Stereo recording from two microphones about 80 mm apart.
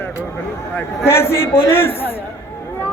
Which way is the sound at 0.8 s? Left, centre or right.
Left.